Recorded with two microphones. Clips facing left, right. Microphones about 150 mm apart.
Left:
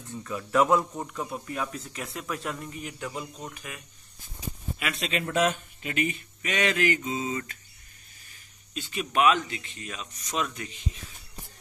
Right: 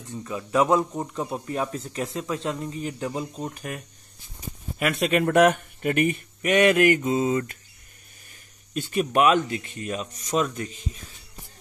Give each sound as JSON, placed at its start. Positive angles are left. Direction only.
{"t": 0.2, "sound": "speech", "side_deg": -20}
{"t": 8.7, "sound": "speech", "side_deg": -50}